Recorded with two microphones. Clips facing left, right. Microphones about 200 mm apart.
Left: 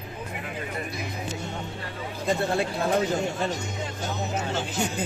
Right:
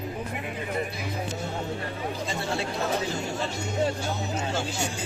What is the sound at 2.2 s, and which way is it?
Speech, 55° left (ahead or behind).